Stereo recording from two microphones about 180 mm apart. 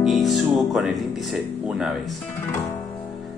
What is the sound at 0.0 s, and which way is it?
Music, centre (ahead or behind).